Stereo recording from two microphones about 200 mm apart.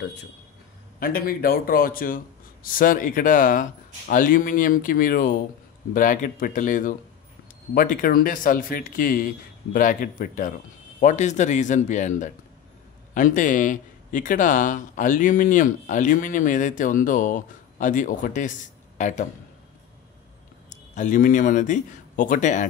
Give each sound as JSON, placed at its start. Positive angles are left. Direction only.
{"t": 0.9, "sound": "speech", "side_deg": 45}
{"t": 20.7, "sound": "a man's voice", "side_deg": 40}